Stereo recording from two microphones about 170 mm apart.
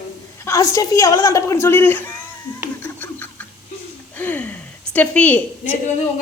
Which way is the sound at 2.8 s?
10° left (ahead or behind).